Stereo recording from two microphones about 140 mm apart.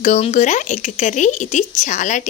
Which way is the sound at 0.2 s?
60° left (ahead or behind).